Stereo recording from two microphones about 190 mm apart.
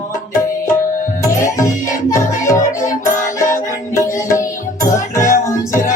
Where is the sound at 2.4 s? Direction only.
15° left (ahead or behind).